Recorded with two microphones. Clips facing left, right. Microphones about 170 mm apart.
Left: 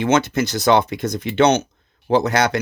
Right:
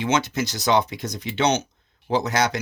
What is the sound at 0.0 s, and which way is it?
Speech, 55° left (ahead or behind).